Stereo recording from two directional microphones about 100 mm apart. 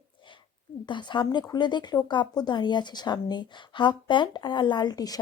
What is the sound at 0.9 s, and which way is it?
Speech, 50° left (ahead or behind).